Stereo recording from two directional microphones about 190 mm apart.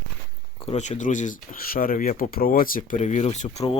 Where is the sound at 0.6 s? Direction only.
35° left (ahead or behind).